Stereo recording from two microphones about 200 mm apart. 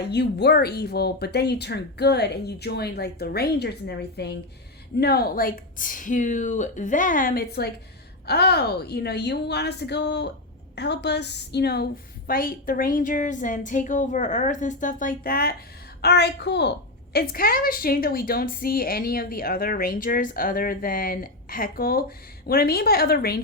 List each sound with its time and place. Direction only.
0.0 s a woman's voice: 55° left (ahead or behind)